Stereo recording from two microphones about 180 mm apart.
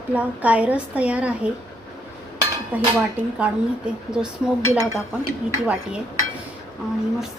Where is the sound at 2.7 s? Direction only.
10° right (ahead or behind).